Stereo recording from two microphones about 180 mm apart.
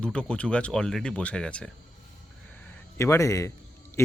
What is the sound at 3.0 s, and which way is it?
Speech, 15° left (ahead or behind).